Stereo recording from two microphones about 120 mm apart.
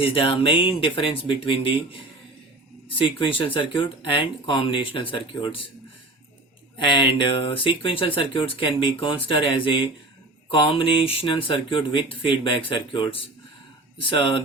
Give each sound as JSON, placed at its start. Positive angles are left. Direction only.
{"t": 0.0, "sound": "speech", "side_deg": 50}
{"t": 6.8, "sound": "speech", "side_deg": 45}